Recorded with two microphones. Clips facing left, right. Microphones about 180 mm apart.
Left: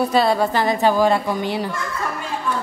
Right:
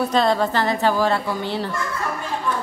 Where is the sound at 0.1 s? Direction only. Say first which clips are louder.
Left 1 dB; 10° left (ahead or behind).